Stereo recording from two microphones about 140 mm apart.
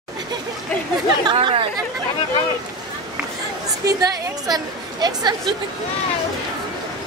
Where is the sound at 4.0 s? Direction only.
30° right (ahead or behind).